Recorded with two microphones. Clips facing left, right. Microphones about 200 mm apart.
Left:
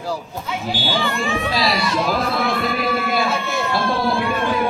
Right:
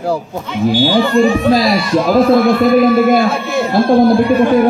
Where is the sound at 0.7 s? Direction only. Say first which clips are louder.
Right 11 dB; 50° right (ahead or behind).